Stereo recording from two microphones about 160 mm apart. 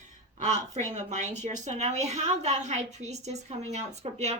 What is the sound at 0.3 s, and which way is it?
A woman's voice, 45° right (ahead or behind).